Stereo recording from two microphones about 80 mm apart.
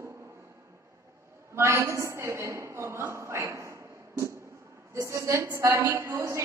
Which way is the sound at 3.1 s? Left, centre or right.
Right.